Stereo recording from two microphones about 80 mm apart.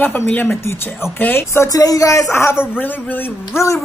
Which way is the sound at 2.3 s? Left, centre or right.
Left.